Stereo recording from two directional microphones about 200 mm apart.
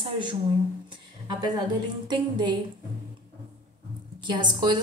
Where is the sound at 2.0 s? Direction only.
25° right (ahead or behind).